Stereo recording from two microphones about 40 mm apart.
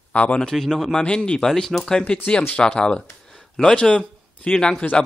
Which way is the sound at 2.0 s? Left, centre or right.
Left.